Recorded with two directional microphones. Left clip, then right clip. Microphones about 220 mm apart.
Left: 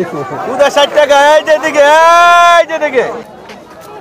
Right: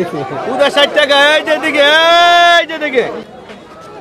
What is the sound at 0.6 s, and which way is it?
Speech, 45° right (ahead or behind).